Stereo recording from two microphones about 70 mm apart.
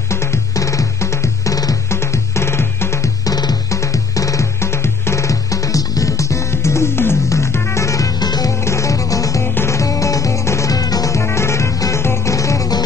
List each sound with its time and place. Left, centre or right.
0.1 s music: left
1.9 s music: left
3.3 s music: left
3.7 s music: left
8.2 s music: left
8.5 s music: left
9.4 s music: left
11.1 s music: left
12.4 s music: left